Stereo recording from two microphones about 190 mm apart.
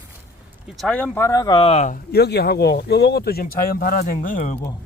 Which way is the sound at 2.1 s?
60° left (ahead or behind).